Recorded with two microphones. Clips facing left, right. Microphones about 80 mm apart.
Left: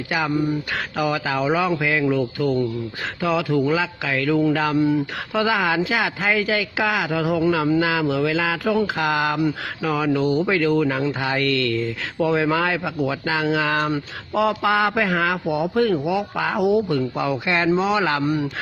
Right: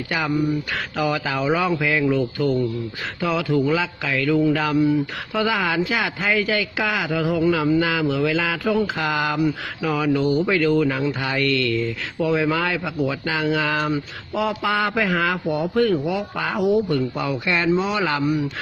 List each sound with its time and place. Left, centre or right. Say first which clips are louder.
0.1 s speech: even; centre